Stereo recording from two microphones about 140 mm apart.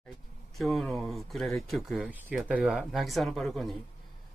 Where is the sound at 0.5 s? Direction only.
Centre (ahead or behind).